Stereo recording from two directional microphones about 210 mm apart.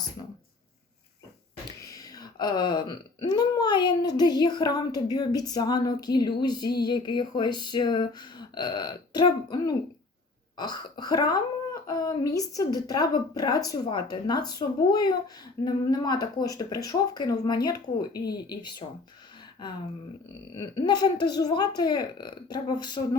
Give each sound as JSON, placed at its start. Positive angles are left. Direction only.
{"t": 2.0, "sound": "speech", "side_deg": 20}
{"t": 20.6, "sound": "speech", "side_deg": 20}